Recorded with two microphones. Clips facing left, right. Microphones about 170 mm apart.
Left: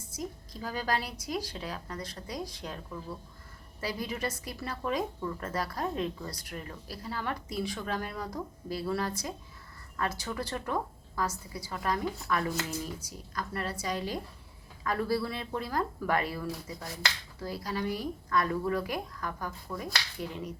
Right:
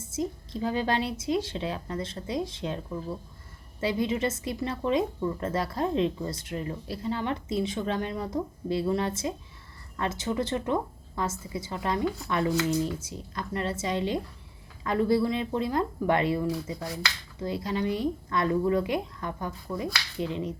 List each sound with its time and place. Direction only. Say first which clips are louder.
0.0 s speech: right 7 dB; 25° right (ahead or behind)